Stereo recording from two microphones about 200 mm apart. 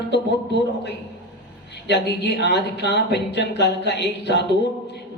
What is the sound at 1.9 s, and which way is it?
Speech, 55° left (ahead or behind).